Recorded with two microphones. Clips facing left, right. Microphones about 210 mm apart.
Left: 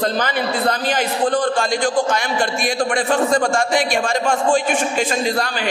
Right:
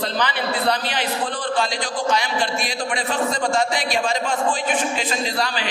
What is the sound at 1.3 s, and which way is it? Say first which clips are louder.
A man's voice: left 5 dB; 50° left (ahead or behind).